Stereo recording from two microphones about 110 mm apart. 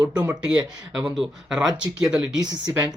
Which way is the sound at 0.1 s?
10° right (ahead or behind).